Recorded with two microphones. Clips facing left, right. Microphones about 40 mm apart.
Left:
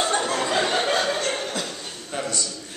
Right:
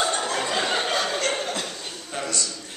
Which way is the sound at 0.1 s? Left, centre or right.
Centre.